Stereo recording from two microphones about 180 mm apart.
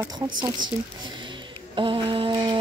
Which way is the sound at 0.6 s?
25° right (ahead or behind).